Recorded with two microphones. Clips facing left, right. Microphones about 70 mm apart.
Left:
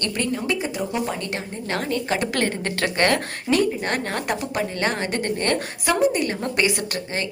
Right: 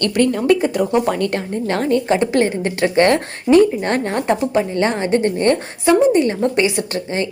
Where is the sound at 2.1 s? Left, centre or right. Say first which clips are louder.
Right 7 dB; right.